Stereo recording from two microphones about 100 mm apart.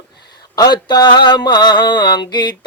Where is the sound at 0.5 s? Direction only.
45° left (ahead or behind).